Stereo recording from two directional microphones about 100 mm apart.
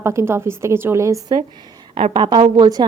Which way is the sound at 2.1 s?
50° right (ahead or behind).